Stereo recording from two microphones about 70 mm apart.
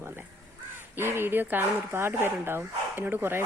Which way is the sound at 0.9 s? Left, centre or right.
Right.